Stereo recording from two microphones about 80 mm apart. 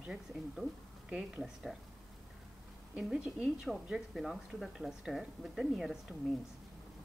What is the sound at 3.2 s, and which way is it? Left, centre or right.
A woman's voice, centre.